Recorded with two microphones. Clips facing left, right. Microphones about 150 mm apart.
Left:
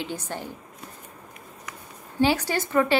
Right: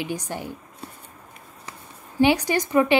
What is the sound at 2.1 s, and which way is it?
Speech, 15° right (ahead or behind).